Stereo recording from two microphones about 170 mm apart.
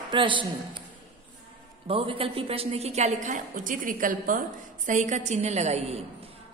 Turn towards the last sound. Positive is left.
turn(degrees=-40)  # may be behind; listen again after turning